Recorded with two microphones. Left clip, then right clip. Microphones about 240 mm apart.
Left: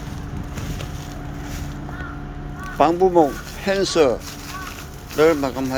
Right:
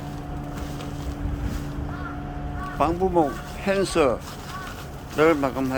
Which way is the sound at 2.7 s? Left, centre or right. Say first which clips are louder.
Left 6 dB; centre.